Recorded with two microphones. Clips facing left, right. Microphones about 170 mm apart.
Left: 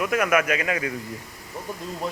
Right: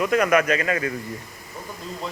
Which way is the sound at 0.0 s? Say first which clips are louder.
Right 3 dB; 5° left (ahead or behind).